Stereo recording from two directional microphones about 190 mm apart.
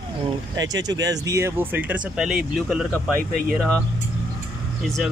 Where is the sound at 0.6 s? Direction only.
20° right (ahead or behind); by 2.8 s 5° right (ahead or behind).